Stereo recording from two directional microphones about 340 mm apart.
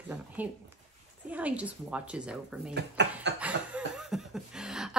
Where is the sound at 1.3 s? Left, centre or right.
Centre.